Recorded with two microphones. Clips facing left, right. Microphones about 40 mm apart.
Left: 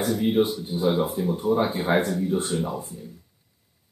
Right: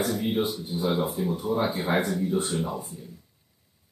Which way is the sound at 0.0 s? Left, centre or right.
Centre.